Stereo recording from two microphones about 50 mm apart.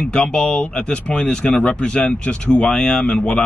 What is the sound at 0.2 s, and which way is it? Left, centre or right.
Speech, centre.